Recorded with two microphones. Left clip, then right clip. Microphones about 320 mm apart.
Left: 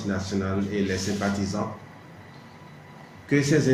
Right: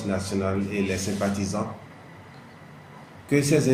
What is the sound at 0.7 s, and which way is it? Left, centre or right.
Speech, centre.